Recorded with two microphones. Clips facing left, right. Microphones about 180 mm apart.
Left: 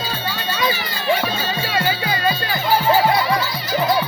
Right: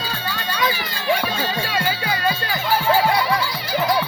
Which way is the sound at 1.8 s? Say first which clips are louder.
Left 3 dB; 10° left (ahead or behind).